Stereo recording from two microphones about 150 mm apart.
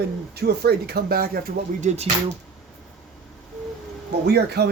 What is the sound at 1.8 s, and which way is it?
Speech, 45° right (ahead or behind).